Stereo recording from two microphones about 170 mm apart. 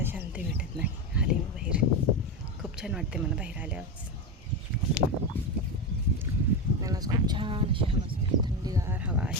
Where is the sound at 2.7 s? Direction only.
Centre (ahead or behind).